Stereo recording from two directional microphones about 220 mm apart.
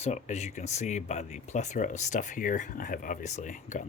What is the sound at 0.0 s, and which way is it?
Speech, 30° left (ahead or behind).